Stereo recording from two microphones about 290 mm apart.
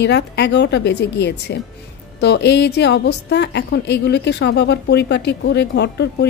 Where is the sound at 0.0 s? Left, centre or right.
Left.